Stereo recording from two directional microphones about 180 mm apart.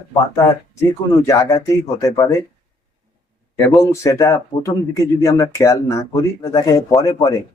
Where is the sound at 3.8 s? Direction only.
15° left (ahead or behind).